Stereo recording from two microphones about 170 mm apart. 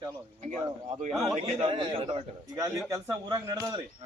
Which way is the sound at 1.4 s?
40° right (ahead or behind).